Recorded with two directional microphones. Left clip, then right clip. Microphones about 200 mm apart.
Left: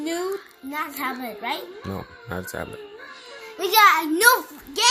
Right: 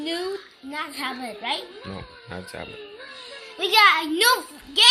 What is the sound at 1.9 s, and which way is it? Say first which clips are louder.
Speech: left 4 dB; 30° left (ahead or behind).